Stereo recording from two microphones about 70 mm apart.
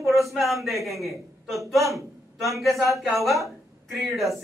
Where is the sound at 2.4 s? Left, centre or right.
Centre.